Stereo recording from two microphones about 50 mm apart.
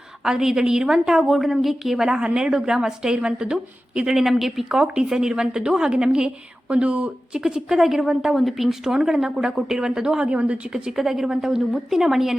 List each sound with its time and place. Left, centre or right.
0.3 s a woman's voice: centre
7.3 s a woman's voice: centre
10.7 s a woman's voice: centre